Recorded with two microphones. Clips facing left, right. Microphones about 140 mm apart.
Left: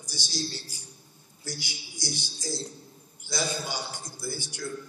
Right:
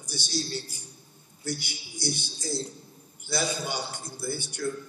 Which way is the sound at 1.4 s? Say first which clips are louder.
Right 5 dB; 55° right (ahead or behind).